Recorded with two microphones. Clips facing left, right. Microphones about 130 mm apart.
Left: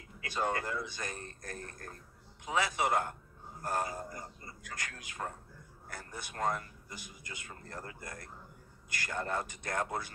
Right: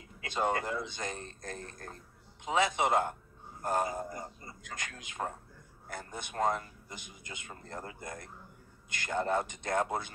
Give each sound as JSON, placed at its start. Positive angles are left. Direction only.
{"t": 0.2, "sound": "speech", "side_deg": -20}